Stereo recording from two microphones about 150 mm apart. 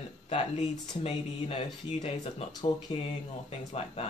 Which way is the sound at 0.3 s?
40° left (ahead or behind).